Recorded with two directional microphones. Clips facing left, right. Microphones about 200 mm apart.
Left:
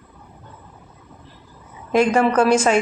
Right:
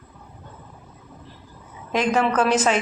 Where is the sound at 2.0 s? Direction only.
10° left (ahead or behind).